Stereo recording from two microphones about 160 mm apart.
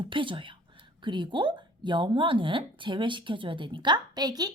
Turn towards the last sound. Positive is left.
turn(degrees=-25)  # may be behind; listen again after turning